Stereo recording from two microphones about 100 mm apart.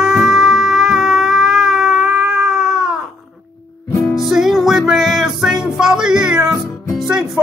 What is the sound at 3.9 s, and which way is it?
Music, 30° left (ahead or behind).